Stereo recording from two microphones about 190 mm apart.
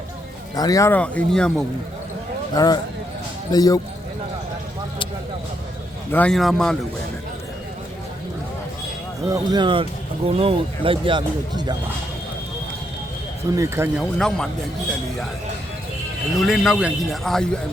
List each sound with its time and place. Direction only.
0.5 s speech: 20° left (ahead or behind); by 1.6 s 5° left (ahead or behind)
2.6 s speech: 20° left (ahead or behind)
6.1 s a man's voice: 5° left (ahead or behind)
9.2 s speech: 20° right (ahead or behind)
13.6 s speech: 15° right (ahead or behind)
14.0 s a man's voice: 5° left (ahead or behind)
16.4 s a man's voice: centre (ahead or behind)